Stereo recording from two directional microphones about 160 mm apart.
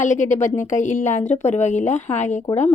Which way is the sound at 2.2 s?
45° left (ahead or behind).